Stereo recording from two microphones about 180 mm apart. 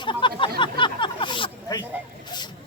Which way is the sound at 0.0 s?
25° left (ahead or behind).